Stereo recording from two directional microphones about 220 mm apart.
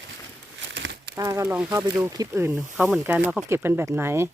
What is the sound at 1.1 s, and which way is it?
Speech, 15° right (ahead or behind).